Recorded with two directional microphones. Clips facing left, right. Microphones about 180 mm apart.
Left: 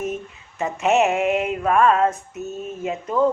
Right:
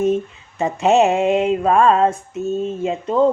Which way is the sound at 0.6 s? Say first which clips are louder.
Right 4 dB; 30° right (ahead or behind).